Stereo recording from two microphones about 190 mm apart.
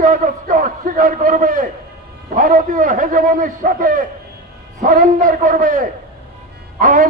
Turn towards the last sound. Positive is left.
turn(degrees=-45)  # may be behind; listen again after turning